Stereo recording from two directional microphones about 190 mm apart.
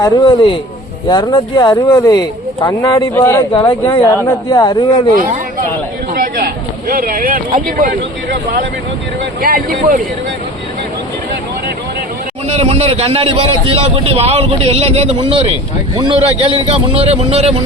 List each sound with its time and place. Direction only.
0.0 s speech: 25° left (ahead or behind)
3.8 s speech: 15° left (ahead or behind)
6.1 s speech: 50° right (ahead or behind)
9.4 s speech: 50° right (ahead or behind)
12.5 s a man's voice: 35° right (ahead or behind)